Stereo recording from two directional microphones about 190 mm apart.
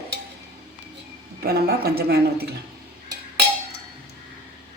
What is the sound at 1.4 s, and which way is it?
Speech, 55° right (ahead or behind).